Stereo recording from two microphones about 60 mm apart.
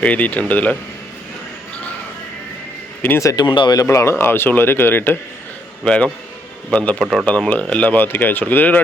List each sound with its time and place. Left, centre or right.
0.0 s speech: left
3.2 s speech: left
3.8 s a man's voice: left
5.8 s speech: centre